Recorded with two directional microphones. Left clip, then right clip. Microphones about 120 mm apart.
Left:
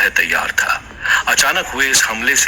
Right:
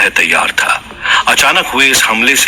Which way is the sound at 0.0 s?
20° right (ahead or behind).